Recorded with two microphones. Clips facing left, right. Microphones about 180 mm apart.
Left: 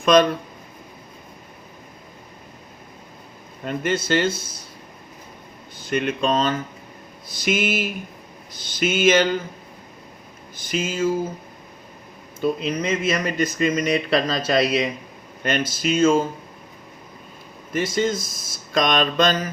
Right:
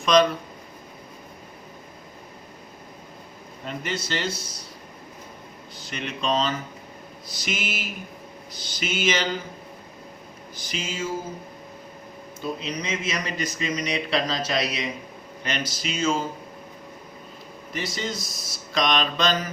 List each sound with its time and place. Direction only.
0.0 s speech: 50° left (ahead or behind)
3.7 s speech: 50° left (ahead or behind)
5.9 s speech: 50° left (ahead or behind)
10.7 s speech: 50° left (ahead or behind)
12.6 s speech: 50° left (ahead or behind)
17.7 s speech: 50° left (ahead or behind)